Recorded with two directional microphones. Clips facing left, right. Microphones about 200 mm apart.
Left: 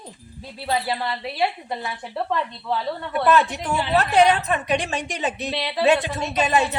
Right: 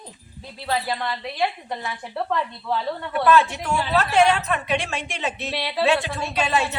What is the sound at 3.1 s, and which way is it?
A woman's voice, 15° left (ahead or behind).